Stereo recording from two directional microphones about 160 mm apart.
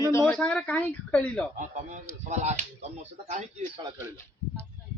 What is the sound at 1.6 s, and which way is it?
Speech, 50° right (ahead or behind).